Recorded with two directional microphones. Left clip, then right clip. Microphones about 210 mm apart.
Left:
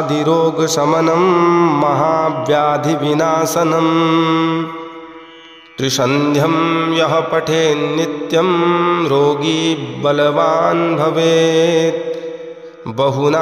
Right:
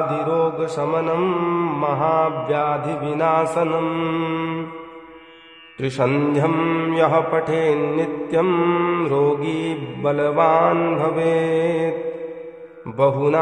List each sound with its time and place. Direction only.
0.1 s mantra: 35° left (ahead or behind)
5.8 s mantra: 25° left (ahead or behind)
12.9 s mantra: 25° left (ahead or behind)